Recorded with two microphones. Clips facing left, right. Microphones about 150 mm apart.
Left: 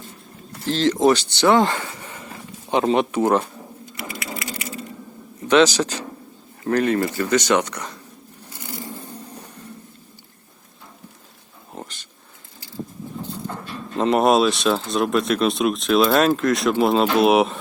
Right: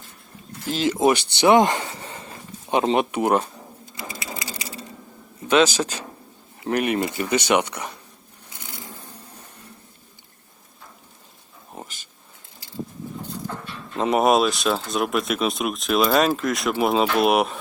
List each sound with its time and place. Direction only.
0.6 s speech: 10° right (ahead or behind)
5.5 s speech: 15° right (ahead or behind)
11.7 s a sound: 5° right (ahead or behind)
13.9 s speech: centre (ahead or behind)